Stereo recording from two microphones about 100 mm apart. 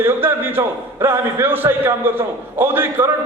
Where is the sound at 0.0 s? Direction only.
20° right (ahead or behind).